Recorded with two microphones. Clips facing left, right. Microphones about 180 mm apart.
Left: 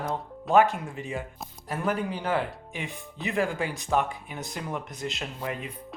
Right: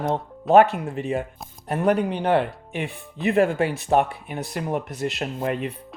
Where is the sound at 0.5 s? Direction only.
65° right (ahead or behind).